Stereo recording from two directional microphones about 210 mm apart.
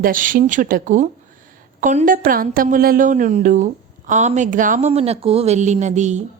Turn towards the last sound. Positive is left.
turn(degrees=-35)  # may be behind; listen again after turning